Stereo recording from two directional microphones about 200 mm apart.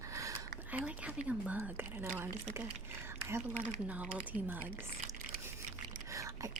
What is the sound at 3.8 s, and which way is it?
Speech, 5° right (ahead or behind).